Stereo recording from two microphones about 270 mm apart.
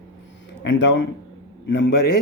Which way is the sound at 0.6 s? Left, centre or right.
Left.